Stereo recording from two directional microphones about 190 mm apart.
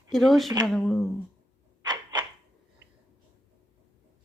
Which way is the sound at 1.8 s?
20° right (ahead or behind).